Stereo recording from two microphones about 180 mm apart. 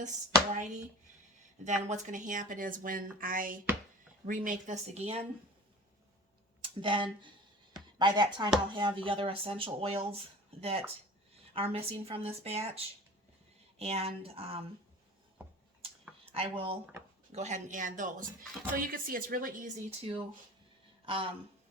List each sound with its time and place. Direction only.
0.5 s speech: 40° right (ahead or behind)
6.6 s speech: 30° right (ahead or behind)
15.8 s a sound: 30° right (ahead or behind)
17.3 s speech: 40° right (ahead or behind)